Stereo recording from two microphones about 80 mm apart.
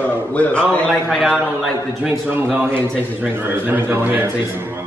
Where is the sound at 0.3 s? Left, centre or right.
Centre.